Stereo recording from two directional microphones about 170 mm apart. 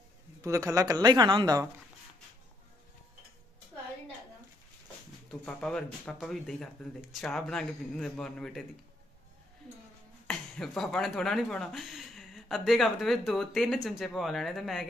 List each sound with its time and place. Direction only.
0.4 s speech: 20° right (ahead or behind)
5.5 s speech: 5° left (ahead or behind)
10.2 s speech: 5° left (ahead or behind)